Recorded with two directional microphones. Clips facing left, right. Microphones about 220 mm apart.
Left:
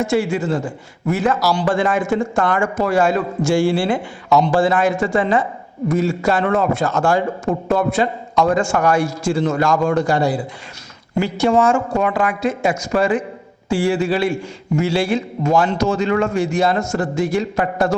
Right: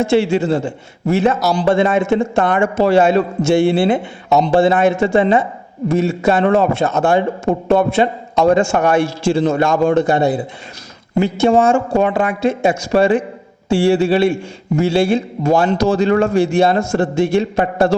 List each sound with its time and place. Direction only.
0.0 s a man's voice: 25° right (ahead or behind)